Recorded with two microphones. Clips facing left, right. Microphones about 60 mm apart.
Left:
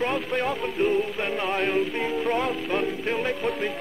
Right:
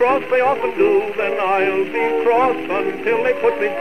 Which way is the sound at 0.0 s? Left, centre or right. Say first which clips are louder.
Right 11 dB; right.